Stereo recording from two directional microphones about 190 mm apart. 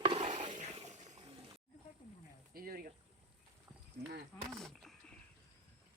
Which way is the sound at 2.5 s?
50° right (ahead or behind).